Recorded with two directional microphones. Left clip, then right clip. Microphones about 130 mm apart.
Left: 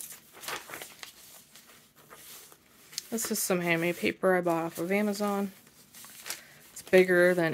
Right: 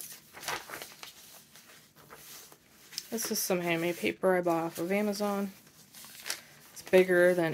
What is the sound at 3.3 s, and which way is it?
Speech, 35° left (ahead or behind).